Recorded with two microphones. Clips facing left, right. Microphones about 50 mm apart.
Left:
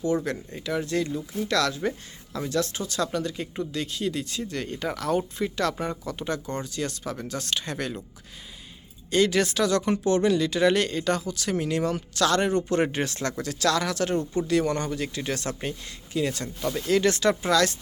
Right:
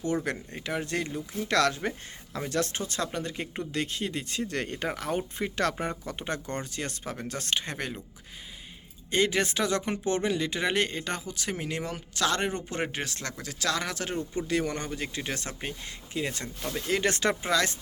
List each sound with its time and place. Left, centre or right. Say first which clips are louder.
0.3 s speech: left 3 dB; right
4.9 s speech: left 4 dB; right
6.1 s speech: left 3 dB; right
9.0 s speech: left 4 dB; right
16.1 s speech: left 5 dB; right
17.0 s speech: left 4 dB; right
17.4 s speech: left 4 dB; centre